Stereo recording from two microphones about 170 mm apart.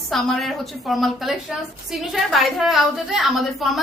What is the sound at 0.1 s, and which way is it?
Speech, centre (ahead or behind).